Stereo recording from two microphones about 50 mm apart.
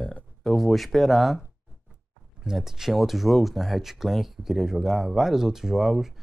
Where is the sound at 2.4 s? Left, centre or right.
Centre.